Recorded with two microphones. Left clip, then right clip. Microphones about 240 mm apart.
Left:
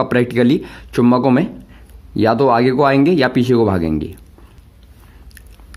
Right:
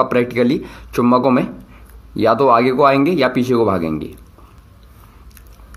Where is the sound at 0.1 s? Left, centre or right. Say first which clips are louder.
Left 1 dB; left.